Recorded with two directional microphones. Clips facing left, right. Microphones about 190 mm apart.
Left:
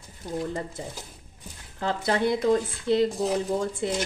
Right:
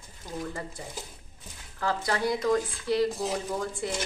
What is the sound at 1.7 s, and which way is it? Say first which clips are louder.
Speech: left 3 dB; 20° left (ahead or behind).